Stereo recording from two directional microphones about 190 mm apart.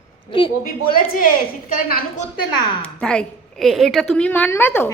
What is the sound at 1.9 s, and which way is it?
Speech, 50° left (ahead or behind).